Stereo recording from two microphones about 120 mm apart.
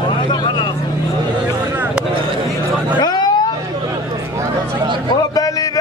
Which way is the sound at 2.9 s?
35° left (ahead or behind).